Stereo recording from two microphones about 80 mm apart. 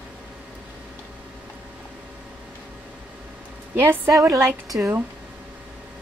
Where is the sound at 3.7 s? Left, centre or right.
Right.